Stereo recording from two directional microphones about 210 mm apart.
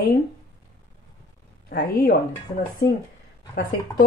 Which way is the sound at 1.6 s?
45° left (ahead or behind).